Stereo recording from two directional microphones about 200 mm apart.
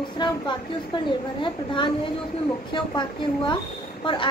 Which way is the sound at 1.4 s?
25° left (ahead or behind).